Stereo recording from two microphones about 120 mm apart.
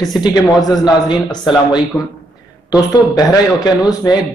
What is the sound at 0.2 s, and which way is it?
A woman's voice, 30° left (ahead or behind).